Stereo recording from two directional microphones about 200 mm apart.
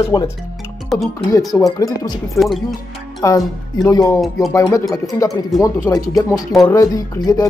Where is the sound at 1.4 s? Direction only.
Centre (ahead or behind).